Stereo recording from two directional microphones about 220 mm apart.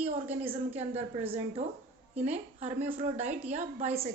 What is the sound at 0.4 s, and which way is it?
A woman's voice, 30° right (ahead or behind).